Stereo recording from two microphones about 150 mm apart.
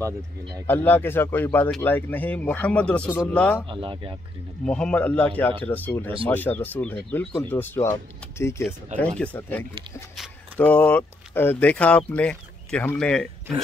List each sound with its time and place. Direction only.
0.7 s speech: 15° left (ahead or behind)
3.6 s speech: 35° right (ahead or behind)
4.6 s speech: 5° left (ahead or behind)
10.1 s a sound: 5° right (ahead or behind)
10.6 s speech: 10° left (ahead or behind)